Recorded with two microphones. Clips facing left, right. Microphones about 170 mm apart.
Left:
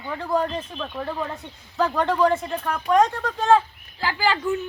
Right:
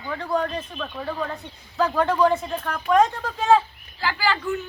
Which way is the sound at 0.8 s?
25° left (ahead or behind).